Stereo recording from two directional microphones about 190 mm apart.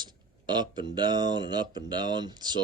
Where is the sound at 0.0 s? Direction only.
25° right (ahead or behind).